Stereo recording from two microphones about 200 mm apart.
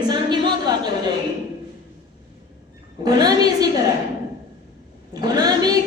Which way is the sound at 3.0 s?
20° right (ahead or behind).